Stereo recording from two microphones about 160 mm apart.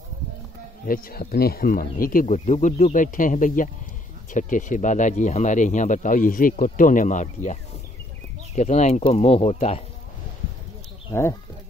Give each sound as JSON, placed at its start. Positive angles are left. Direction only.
{"t": 0.8, "sound": "speech", "side_deg": 65}
{"t": 8.5, "sound": "speech", "side_deg": 45}
{"t": 11.1, "sound": "speech", "side_deg": 15}